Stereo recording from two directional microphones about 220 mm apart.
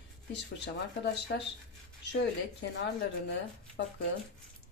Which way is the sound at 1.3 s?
50° left (ahead or behind).